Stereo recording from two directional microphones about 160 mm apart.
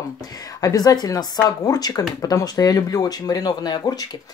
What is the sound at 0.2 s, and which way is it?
A woman's voice, 25° left (ahead or behind).